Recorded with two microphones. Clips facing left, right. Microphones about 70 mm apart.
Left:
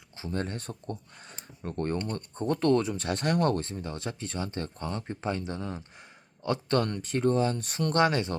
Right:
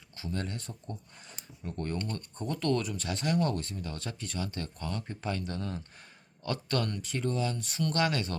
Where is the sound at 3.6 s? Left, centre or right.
Left.